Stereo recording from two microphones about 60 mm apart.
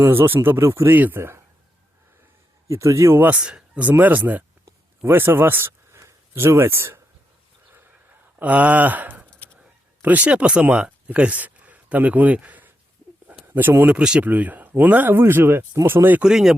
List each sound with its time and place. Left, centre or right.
0.0 s speech: right
0.9 s speech: right
2.6 s speech: right
3.3 s speech: centre
3.8 s speech: right
5.0 s speech: right
8.4 s a sound: right
10.0 s speech: right
13.9 s speech: centre
15.2 s speech: right
16.2 s speech: centre